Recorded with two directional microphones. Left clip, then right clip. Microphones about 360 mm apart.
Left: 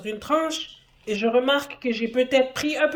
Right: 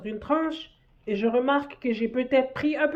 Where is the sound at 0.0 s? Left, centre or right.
Centre.